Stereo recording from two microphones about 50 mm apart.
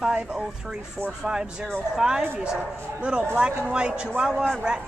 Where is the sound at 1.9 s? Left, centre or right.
Centre.